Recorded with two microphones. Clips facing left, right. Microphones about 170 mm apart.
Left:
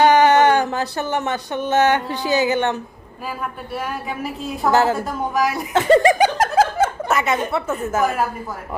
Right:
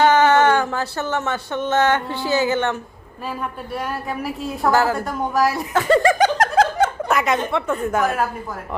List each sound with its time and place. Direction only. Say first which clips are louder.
0.0 s a sound: left 1 dB; 15° left (ahead or behind)
3.2 s a woman's voice: right 1 dB; 5° left (ahead or behind)
4.7 s a woman's voice: left 2 dB; 25° left (ahead or behind)
4.9 s a woman's voice: right 1 dB; centre (ahead or behind)
5.7 s speech: left 3 dB; 20° left (ahead or behind); by 8.2 s 5° left (ahead or behind)